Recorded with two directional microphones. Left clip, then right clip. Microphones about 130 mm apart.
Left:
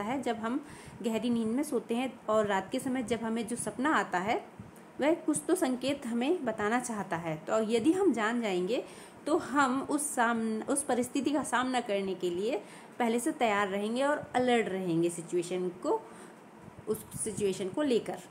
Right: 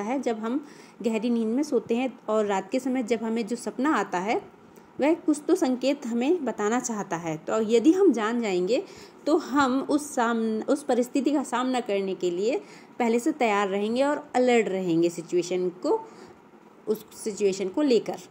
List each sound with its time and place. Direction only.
0.0 s a woman's voice: 15° right (ahead or behind)